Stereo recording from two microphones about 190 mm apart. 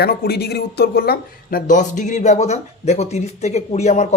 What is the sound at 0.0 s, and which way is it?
Speech, 55° left (ahead or behind).